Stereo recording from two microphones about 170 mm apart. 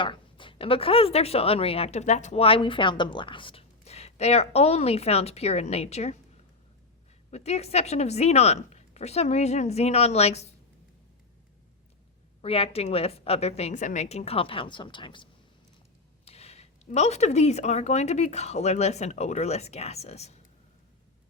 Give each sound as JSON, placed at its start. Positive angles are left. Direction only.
{"t": 0.0, "sound": "speech", "side_deg": 30}
{"t": 7.3, "sound": "speech", "side_deg": 40}
{"t": 12.4, "sound": "speech", "side_deg": 35}